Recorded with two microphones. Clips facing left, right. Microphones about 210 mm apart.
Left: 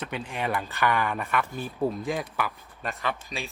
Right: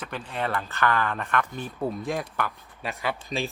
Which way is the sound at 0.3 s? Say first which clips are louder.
Right 2 dB; 10° left (ahead or behind).